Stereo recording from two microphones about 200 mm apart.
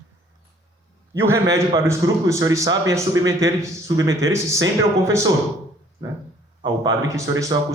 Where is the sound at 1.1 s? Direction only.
15° right (ahead or behind).